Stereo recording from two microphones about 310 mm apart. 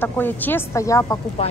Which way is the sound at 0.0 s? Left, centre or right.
Centre.